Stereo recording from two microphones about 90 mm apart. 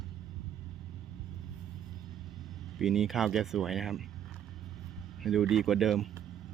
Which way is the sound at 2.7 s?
5° right (ahead or behind).